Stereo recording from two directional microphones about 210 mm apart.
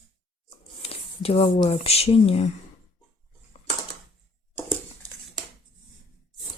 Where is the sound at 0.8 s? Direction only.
25° left (ahead or behind).